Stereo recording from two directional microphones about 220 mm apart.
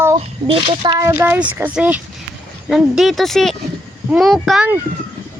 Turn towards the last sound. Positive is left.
turn(degrees=-5)  # may be behind; listen again after turning